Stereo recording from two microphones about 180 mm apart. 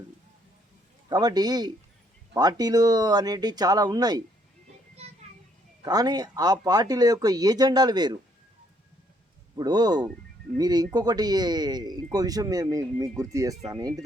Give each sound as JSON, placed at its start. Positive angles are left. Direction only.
{"t": 1.1, "sound": "speech", "side_deg": -20}
{"t": 5.8, "sound": "speech", "side_deg": -20}
{"t": 9.6, "sound": "speech", "side_deg": -25}